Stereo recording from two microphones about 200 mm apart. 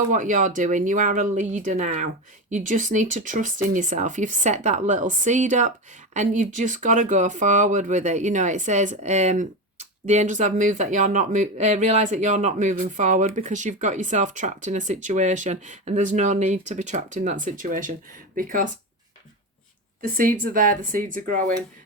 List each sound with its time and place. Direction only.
0.1 s speech: 40° right (ahead or behind)
20.0 s speech: 45° right (ahead or behind)